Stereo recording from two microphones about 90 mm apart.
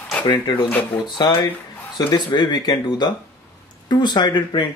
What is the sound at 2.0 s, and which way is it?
Speech, 55° left (ahead or behind).